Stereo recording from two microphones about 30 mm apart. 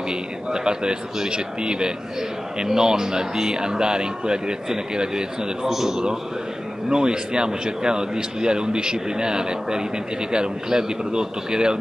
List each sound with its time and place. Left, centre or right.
0.1 s speech: right
5.7 s a man's voice: centre
6.9 s speech: right